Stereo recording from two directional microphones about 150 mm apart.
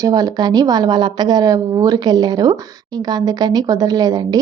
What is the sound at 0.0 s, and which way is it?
A woman's voice, 25° right (ahead or behind).